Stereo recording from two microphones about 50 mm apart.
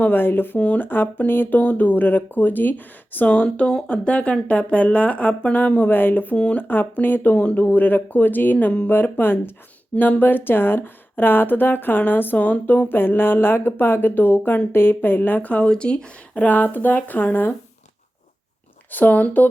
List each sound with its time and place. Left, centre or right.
0.1 s speech: left
0.6 s speech: left
0.9 s speech: left
3.2 s speech: left
5.9 s speech: left
6.3 s speech: left
6.7 s speech: left
8.5 s speech: left
8.9 s speech: left
9.9 s speech: left
12.9 s speech: left
15.6 s speech: centre; by 17.5 s left
18.9 s speech: left